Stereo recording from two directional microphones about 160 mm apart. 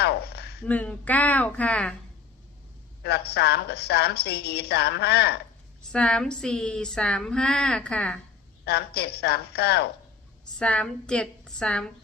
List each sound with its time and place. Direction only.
0.0 s a sound: 90° left
0.6 s speech: 10° left (ahead or behind)
3.0 s a woman's voice: 90° left
5.9 s a woman's voice: 5° left (ahead or behind)
8.6 s a woman's voice: 90° left
10.6 s a woman's voice: 5° left (ahead or behind)